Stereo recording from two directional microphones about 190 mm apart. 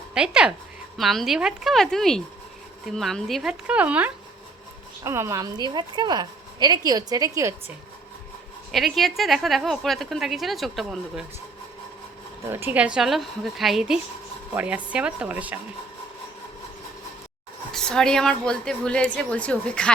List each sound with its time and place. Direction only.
0.1 s a woman's voice: 5° right (ahead or behind)
8.7 s a woman's voice: centre (ahead or behind)
12.5 s a woman's voice: 10° right (ahead or behind)
17.7 s a woman's voice: 5° left (ahead or behind)